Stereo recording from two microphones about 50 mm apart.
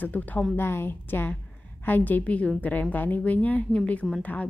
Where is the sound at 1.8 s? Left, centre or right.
Left.